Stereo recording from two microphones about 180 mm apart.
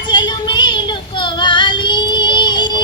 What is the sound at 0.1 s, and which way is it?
Child singing, 25° left (ahead or behind).